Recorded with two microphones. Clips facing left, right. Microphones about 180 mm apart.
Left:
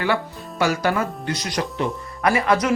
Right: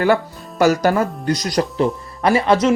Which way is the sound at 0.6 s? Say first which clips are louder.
Right 6 dB; 40° right (ahead or behind).